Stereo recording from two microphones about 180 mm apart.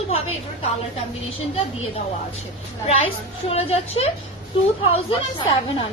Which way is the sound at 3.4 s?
35° left (ahead or behind).